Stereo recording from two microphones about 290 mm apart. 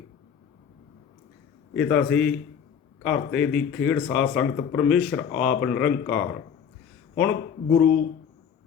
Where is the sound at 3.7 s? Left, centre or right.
Left.